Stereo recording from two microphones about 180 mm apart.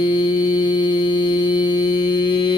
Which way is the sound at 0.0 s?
25° left (ahead or behind).